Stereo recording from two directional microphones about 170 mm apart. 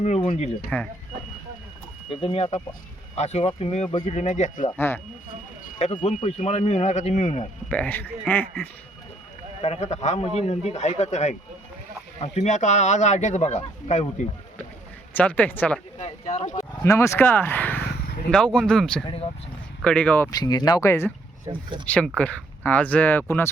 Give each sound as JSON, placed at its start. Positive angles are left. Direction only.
{"t": 0.0, "sound": "speech", "side_deg": 40}
{"t": 0.7, "sound": "speech", "side_deg": 5}
{"t": 2.2, "sound": "a man's voice", "side_deg": 35}
{"t": 6.0, "sound": "a man's voice", "side_deg": 40}
{"t": 7.7, "sound": "speech", "side_deg": 10}
{"t": 9.6, "sound": "a man's voice", "side_deg": 40}
{"t": 15.1, "sound": "speech", "side_deg": 10}
{"t": 16.0, "sound": "speech", "side_deg": 40}
{"t": 16.8, "sound": "speech", "side_deg": 15}
{"t": 19.0, "sound": "a man's voice", "side_deg": 35}
{"t": 19.8, "sound": "speech", "side_deg": 5}
{"t": 20.3, "sound": "speech", "side_deg": 25}